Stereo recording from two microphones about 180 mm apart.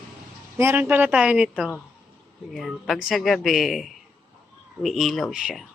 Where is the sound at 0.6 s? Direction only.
15° right (ahead or behind).